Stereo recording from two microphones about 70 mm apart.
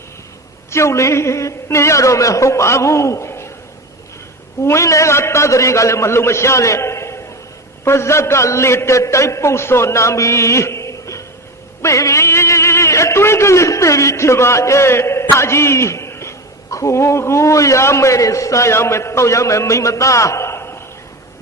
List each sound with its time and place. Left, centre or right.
0.7 s a man's voice: left
4.6 s a man's voice: left